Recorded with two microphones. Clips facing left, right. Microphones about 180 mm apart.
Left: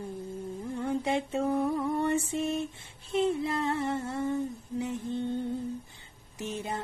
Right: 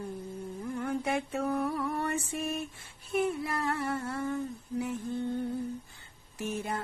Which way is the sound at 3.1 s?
25° left (ahead or behind).